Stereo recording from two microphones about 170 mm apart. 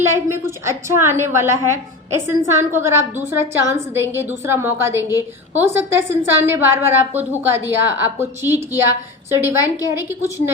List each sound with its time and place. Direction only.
0.0 s a woman's voice: 15° right (ahead or behind)